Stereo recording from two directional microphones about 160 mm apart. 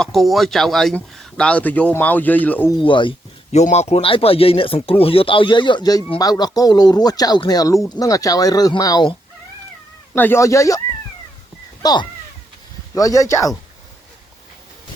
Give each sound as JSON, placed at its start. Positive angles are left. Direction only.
{"t": 0.0, "sound": "speech", "side_deg": 0}
{"t": 2.7, "sound": "speech", "side_deg": 30}
{"t": 3.5, "sound": "speech", "side_deg": 45}
{"t": 10.2, "sound": "speech", "side_deg": 15}
{"t": 11.8, "sound": "cat", "side_deg": 25}
{"t": 12.9, "sound": "speech", "side_deg": 20}